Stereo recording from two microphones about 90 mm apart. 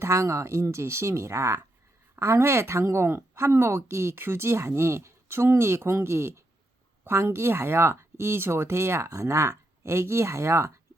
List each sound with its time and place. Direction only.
0.0 s speech: 35° right (ahead or behind)